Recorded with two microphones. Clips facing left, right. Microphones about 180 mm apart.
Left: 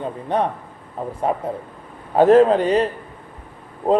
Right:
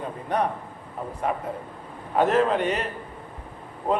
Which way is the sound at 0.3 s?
25° left (ahead or behind).